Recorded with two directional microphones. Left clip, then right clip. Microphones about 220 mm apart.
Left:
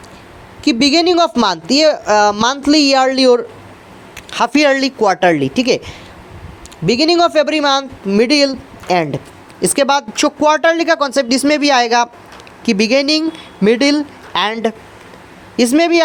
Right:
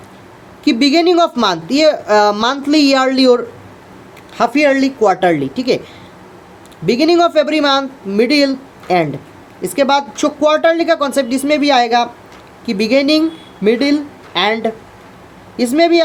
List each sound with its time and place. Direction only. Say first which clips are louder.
0.6 s speech: even; 15° left (ahead or behind)
4.3 s speech: even; 20° left (ahead or behind)